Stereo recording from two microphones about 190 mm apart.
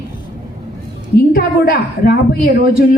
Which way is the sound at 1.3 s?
55° left (ahead or behind).